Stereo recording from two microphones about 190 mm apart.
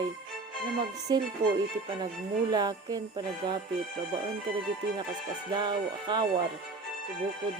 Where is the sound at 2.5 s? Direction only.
20° right (ahead or behind).